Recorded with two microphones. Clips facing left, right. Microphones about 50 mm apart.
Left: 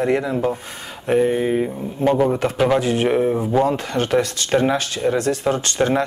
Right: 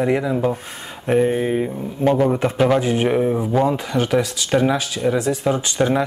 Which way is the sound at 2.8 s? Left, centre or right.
Centre.